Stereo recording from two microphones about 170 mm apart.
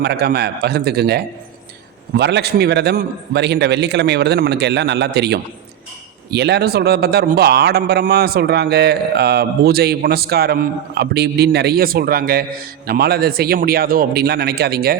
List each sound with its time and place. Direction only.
0.0 s a man's voice: 70° right (ahead or behind)